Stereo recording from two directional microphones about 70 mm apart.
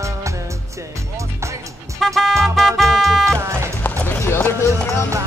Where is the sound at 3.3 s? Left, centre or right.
Right.